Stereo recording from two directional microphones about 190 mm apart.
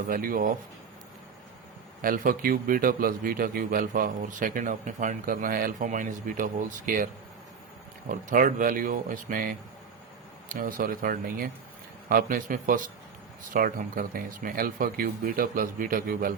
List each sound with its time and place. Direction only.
0.1 s a man's voice: 50° right (ahead or behind)
2.0 s a man's voice: 50° right (ahead or behind)
8.1 s a man's voice: 45° right (ahead or behind)